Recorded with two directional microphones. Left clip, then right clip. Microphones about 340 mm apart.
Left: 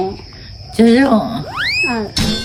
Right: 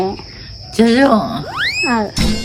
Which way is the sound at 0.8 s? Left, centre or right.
Centre.